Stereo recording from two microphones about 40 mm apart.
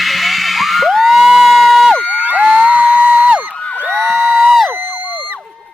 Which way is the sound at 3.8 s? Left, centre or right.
Right.